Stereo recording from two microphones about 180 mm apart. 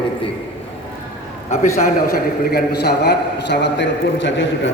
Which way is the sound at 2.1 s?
60° left (ahead or behind).